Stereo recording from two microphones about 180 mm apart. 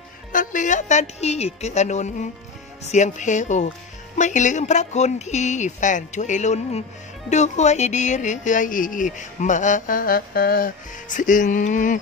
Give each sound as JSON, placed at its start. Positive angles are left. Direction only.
{"t": 0.3, "sound": "speech", "side_deg": 45}